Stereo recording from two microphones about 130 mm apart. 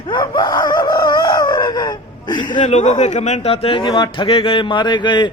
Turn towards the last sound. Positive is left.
turn(degrees=35)  # may be behind; listen again after turning